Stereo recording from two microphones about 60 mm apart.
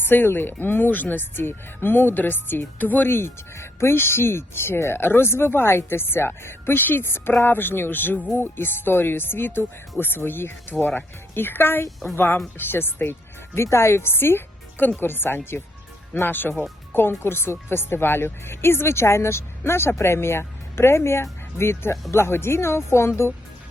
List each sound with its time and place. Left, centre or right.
0.0 s speech: left
3.1 s speech: left
13.6 s speech: left